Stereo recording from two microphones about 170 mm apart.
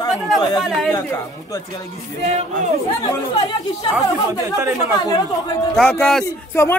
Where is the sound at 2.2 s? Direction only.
45° right (ahead or behind).